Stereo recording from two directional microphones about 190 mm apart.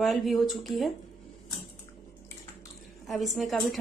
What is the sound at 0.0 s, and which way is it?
Speech, centre (ahead or behind).